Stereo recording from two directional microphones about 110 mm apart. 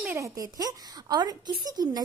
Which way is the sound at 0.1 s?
30° right (ahead or behind).